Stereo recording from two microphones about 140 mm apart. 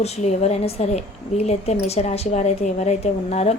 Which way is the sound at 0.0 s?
50° left (ahead or behind).